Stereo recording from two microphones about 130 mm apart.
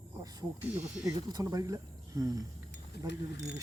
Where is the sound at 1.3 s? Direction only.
30° right (ahead or behind).